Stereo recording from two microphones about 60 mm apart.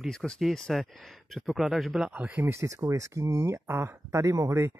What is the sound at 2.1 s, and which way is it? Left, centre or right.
Speech, right.